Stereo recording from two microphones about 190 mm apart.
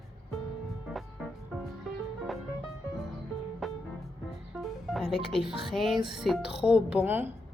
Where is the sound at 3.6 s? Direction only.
Centre (ahead or behind).